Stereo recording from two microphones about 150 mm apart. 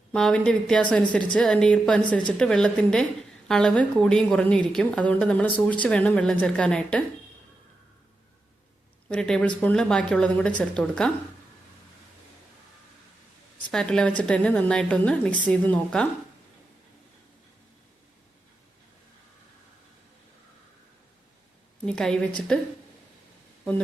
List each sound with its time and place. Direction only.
0.1 s a woman's voice: 5° left (ahead or behind)
9.0 s speech: 5° left (ahead or behind)
13.7 s speech: 5° left (ahead or behind)
21.8 s a woman's voice: 5° left (ahead or behind)